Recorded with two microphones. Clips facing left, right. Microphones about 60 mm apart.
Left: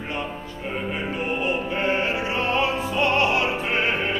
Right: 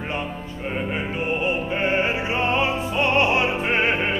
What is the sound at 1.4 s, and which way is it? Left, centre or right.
Opera, right.